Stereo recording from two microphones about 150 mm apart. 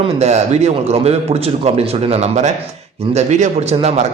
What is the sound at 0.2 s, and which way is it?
A man's voice, 45° right (ahead or behind).